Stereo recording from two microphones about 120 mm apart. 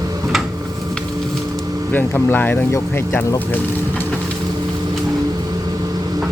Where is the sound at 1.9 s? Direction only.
15° left (ahead or behind).